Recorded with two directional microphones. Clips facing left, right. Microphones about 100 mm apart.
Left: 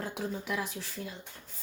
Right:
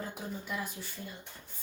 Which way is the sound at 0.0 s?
85° left.